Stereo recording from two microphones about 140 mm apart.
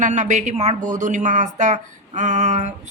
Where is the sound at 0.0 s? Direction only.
60° right (ahead or behind).